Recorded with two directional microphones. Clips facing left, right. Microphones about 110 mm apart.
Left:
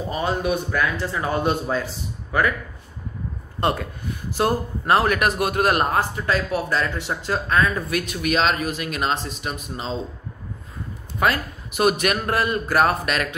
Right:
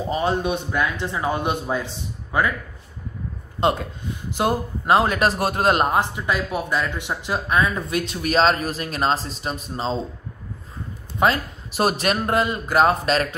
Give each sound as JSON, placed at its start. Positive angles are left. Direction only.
{"t": 0.1, "sound": "a man's voice", "side_deg": -25}
{"t": 3.6, "sound": "speech", "side_deg": -20}
{"t": 7.9, "sound": "speech", "side_deg": -30}
{"t": 11.1, "sound": "a man's voice", "side_deg": -30}